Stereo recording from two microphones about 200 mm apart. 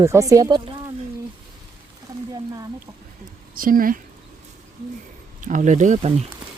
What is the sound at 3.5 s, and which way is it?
Speech, 45° right (ahead or behind).